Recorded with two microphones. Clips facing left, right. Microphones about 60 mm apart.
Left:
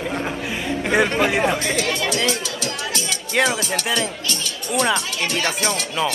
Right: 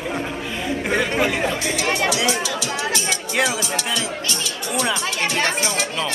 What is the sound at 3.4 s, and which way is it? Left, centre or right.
Speech, left.